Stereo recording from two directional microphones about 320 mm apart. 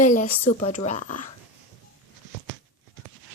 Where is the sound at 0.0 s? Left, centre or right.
Left.